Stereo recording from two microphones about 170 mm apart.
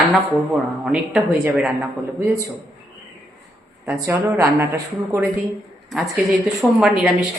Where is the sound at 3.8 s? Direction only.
15° right (ahead or behind).